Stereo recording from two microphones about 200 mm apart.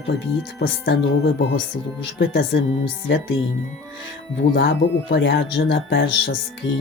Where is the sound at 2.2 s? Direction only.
50° left (ahead or behind).